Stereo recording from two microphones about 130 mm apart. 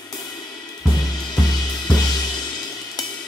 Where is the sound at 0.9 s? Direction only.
30° left (ahead or behind).